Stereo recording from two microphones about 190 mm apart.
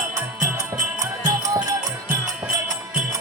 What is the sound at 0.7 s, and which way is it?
Music, 15° right (ahead or behind).